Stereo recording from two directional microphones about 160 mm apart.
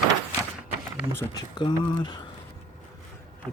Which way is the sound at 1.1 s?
25° left (ahead or behind).